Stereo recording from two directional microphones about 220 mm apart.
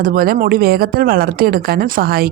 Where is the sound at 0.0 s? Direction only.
40° right (ahead or behind).